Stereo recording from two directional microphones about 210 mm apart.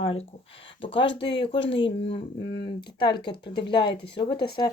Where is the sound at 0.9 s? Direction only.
25° left (ahead or behind).